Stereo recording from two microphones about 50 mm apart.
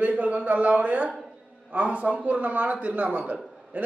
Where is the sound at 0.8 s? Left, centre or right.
Right.